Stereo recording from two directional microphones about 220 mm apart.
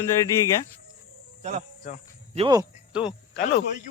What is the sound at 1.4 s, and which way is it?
Cricket, 30° right (ahead or behind).